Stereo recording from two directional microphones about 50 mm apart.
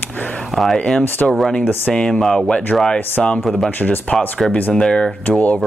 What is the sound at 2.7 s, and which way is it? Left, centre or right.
Speech, centre.